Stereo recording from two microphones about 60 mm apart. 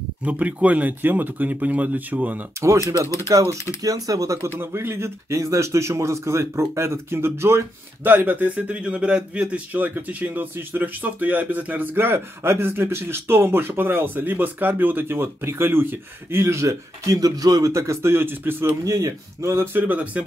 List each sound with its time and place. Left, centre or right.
0.2 s speech: right
3.3 s speech: right
3.8 s speech: right
4.6 s speech: right
8.0 s speech: right
18.9 s speech: right
19.5 s speech: right
19.8 s speech: right